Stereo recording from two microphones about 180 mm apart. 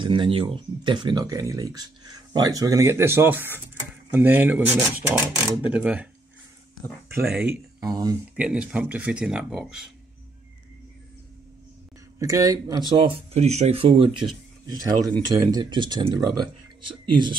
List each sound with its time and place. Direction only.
0.0 s speech: 25° right (ahead or behind); by 6.0 s 10° right (ahead or behind)
7.2 s speech: 10° right (ahead or behind)
7.8 s speech: 20° right (ahead or behind)
8.4 s speech: 5° right (ahead or behind)
12.2 s speech: 20° right (ahead or behind)